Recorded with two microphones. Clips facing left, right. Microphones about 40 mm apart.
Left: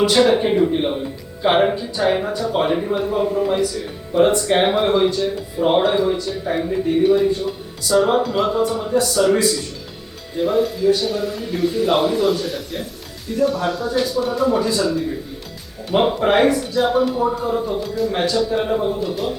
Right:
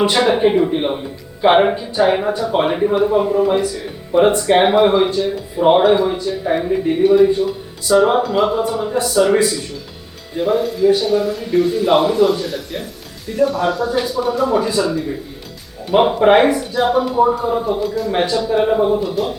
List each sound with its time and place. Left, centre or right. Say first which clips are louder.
0.1 s speech: right 1 dB; centre
7.0 s a man's voice: right 6 dB; centre
7.9 s speech: right 3 dB; centre
8.2 s a man's voice: right 2 dB; centre
8.9 s a man's voice: right 3 dB; right; by 10.8 s centre
10.8 s a man's voice: right 4 dB; centre
14.6 s a man's voice: right 1 dB; centre
18.1 s speech: right 3 dB; centre
18.9 s a man's voice: right 3 dB; centre